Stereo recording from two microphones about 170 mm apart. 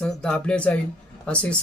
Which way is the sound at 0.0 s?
5° left (ahead or behind).